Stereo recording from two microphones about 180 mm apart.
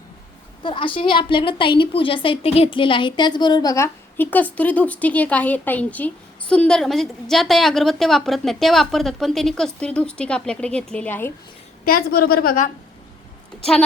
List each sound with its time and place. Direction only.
0.6 s a woman's voice: 30° left (ahead or behind); by 11.3 s 10° left (ahead or behind)
11.9 s a woman's voice: 55° left (ahead or behind)